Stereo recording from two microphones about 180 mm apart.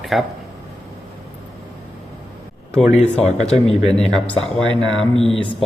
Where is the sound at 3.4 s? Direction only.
35° left (ahead or behind).